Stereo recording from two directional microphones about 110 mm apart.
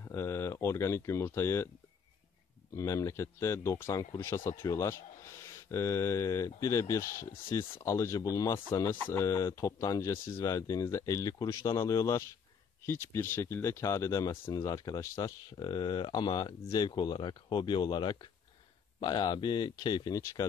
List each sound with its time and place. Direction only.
0.0 s speech: 25° left (ahead or behind)
2.7 s speech: 30° left (ahead or behind)
20.4 s speech: 25° left (ahead or behind)